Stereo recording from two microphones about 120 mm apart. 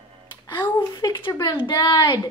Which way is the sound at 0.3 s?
40° left (ahead or behind).